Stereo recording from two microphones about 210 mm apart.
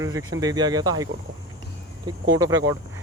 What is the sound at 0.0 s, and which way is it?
Speech, 15° right (ahead or behind).